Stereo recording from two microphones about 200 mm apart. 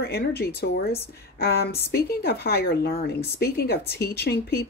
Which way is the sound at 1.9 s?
50° left (ahead or behind).